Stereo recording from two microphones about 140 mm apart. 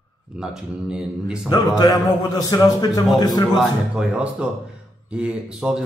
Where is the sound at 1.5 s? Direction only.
25° left (ahead or behind).